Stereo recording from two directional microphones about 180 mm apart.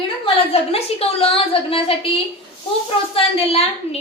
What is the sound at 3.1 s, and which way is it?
Speech, 30° left (ahead or behind).